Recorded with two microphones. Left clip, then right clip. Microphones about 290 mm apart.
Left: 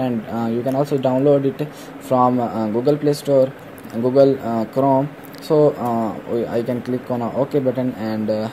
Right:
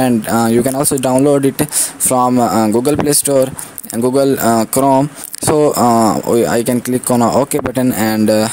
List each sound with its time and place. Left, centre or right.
0.0 s speech: right